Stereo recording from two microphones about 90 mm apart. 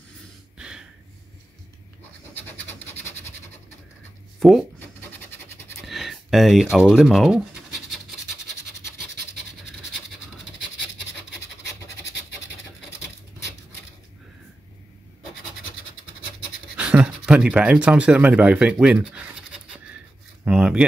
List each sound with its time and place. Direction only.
0.6 s gasp: 10° right (ahead or behind)
2.3 s scratch: 20° left (ahead or behind)
4.4 s speech: centre (ahead or behind)
4.7 s scratch: 25° left (ahead or behind)
5.8 s a sound: centre (ahead or behind)
6.9 s speech: centre (ahead or behind)
16.7 s a sound: 10° right (ahead or behind)
20.4 s speech: 10° right (ahead or behind)